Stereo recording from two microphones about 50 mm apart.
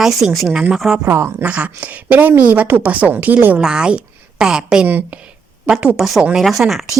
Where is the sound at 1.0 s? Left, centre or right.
Right.